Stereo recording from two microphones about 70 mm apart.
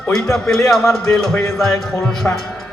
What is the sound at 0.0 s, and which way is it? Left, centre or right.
Speech, centre.